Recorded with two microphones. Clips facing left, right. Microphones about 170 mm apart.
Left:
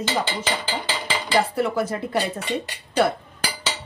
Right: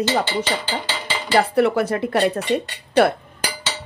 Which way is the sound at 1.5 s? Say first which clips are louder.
Right 5 dB; 70° right (ahead or behind).